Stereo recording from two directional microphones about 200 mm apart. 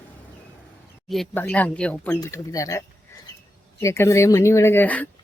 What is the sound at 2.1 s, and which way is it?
Speech, 15° left (ahead or behind).